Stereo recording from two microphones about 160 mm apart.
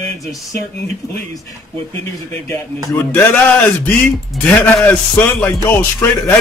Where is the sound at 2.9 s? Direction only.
10° left (ahead or behind).